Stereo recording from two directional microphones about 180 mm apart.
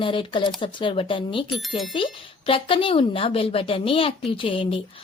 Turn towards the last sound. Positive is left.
turn(degrees=30)  # may be behind; listen again after turning